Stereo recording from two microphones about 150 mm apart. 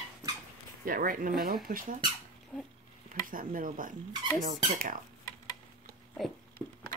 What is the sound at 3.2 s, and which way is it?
Speech, 65° right (ahead or behind).